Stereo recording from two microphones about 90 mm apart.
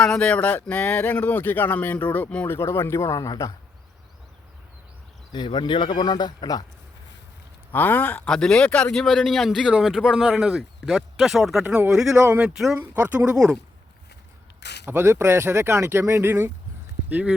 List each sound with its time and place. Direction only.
0.0 s speech: 10° left (ahead or behind)
2.6 s speech: 30° left (ahead or behind)
5.3 s a man's voice: 60° left (ahead or behind)
7.7 s speech: 20° left (ahead or behind)
8.3 s speech: 10° left (ahead or behind)
11.6 s speech: 20° right (ahead or behind)
11.9 s speech: 5° right (ahead or behind)
14.8 s speech: 25° right (ahead or behind)